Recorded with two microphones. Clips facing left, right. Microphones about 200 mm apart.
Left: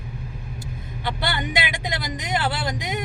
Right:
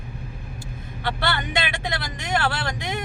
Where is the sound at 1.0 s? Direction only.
15° left (ahead or behind).